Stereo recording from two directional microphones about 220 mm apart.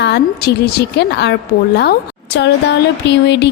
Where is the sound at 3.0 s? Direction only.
50° left (ahead or behind).